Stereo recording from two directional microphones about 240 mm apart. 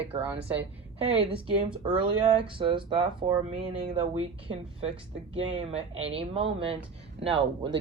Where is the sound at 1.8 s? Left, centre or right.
Centre.